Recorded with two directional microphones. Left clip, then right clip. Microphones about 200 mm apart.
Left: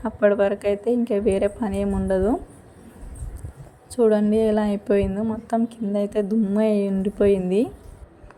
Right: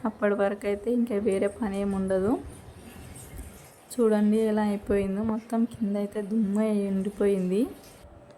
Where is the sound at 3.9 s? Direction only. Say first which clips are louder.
Left 5 dB; 15° left (ahead or behind).